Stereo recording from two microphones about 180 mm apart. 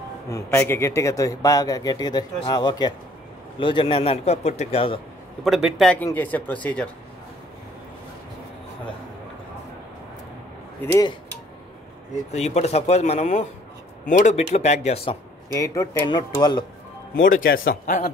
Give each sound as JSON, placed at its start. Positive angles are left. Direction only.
{"t": 0.3, "sound": "a man's voice", "side_deg": 10}
{"t": 5.4, "sound": "a man's voice", "side_deg": 0}
{"t": 12.3, "sound": "a man's voice", "side_deg": 35}
{"t": 15.5, "sound": "a man's voice", "side_deg": 15}
{"t": 17.1, "sound": "speech", "side_deg": 50}